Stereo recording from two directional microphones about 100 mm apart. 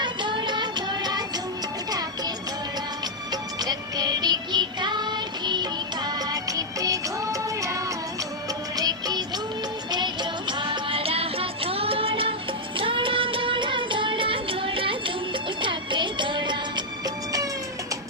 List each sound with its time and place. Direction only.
0.0 s music: 50° right (ahead or behind)
3.6 s music: 40° right (ahead or behind); by 12.3 s 65° right (ahead or behind)
12.7 s music of bollywood: 60° right (ahead or behind)